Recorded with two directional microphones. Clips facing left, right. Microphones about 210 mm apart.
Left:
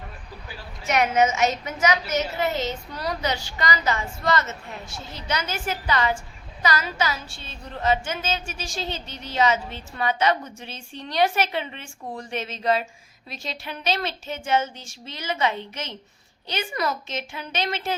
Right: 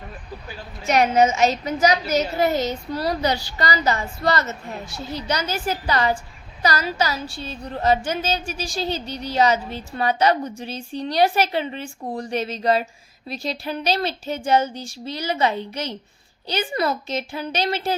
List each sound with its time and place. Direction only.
0.9 s a woman's voice: 35° right (ahead or behind)